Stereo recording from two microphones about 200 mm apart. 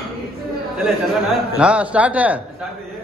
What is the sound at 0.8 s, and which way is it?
A man's voice, centre (ahead or behind).